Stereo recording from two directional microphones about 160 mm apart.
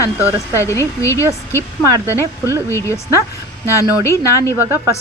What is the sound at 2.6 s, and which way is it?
A woman's voice, 20° left (ahead or behind).